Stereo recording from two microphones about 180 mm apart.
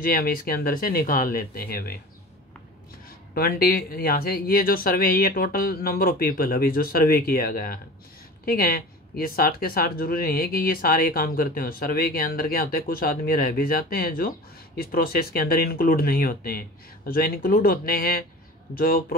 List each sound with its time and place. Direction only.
0.0 s speech: 55° left (ahead or behind)
3.3 s speech: 55° left (ahead or behind)